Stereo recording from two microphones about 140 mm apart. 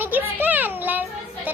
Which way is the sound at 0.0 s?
15° right (ahead or behind).